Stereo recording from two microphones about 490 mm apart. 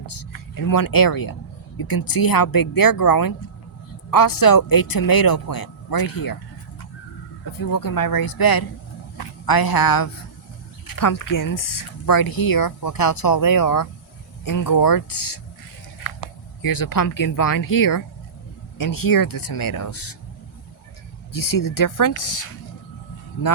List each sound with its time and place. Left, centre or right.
0.0 s a sound: left
0.5 s speech: left
7.7 s speech: left
16.6 s speech: left
21.3 s speech: left